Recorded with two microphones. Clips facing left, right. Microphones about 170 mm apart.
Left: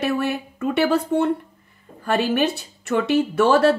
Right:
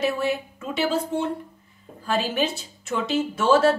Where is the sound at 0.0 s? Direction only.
60° left (ahead or behind).